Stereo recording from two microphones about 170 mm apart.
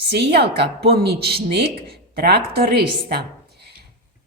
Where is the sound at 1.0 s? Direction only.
70° right (ahead or behind).